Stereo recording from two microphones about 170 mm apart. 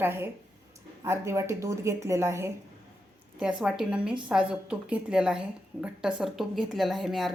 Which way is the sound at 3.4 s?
5° right (ahead or behind).